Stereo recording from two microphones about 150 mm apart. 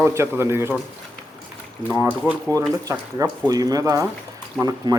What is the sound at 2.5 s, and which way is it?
Speech, 20° right (ahead or behind).